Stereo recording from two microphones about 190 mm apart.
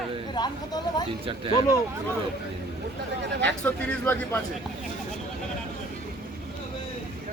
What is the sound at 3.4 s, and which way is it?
Speech, 10° left (ahead or behind).